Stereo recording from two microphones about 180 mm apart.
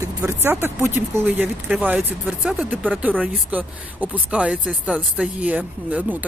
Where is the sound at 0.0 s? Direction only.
15° right (ahead or behind).